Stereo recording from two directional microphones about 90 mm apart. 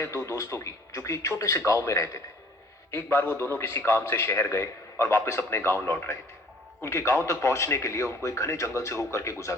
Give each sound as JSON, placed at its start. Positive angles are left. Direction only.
{"t": 0.0, "sound": "a man's voice", "side_deg": 35}